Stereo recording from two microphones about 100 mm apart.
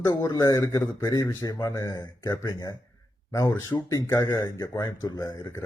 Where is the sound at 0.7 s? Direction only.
30° left (ahead or behind).